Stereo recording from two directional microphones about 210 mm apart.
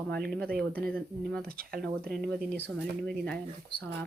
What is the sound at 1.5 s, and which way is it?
Speech, 45° right (ahead or behind).